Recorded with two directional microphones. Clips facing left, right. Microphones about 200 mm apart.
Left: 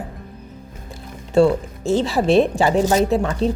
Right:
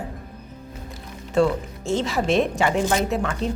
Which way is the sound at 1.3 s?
35° left (ahead or behind).